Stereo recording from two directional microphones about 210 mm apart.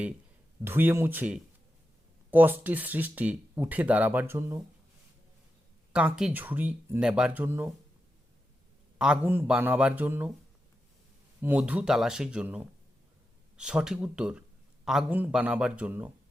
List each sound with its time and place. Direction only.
0.6 s speech: 10° right (ahead or behind)
5.9 s speech: 5° right (ahead or behind)
9.0 s speech: 5° right (ahead or behind)
11.4 s a man's voice: 5° right (ahead or behind)